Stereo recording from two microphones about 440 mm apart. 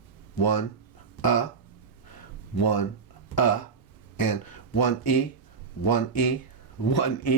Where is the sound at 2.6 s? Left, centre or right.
Left.